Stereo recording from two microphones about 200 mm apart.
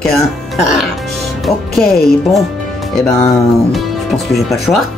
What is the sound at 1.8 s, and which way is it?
Speech, centre (ahead or behind).